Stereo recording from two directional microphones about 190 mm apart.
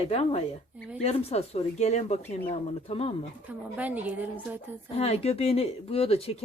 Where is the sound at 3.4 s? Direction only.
10° right (ahead or behind).